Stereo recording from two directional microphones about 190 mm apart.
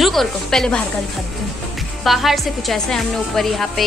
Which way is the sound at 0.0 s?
Centre (ahead or behind).